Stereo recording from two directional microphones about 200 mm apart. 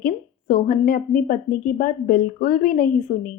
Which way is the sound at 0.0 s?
45° left (ahead or behind).